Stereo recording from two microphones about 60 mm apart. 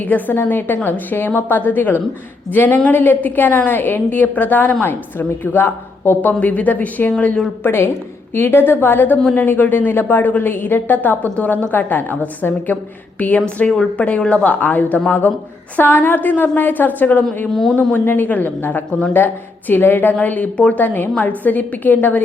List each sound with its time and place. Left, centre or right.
0.0 s a woman's voice: left
7.6 s a woman's voice: left
14.2 s a woman's voice: centre
14.4 s a woman's voice: left
17.5 s a woman's voice: centre
18.0 s a woman's voice: left
18.9 s a woman's voice: centre
19.1 s a woman's voice: left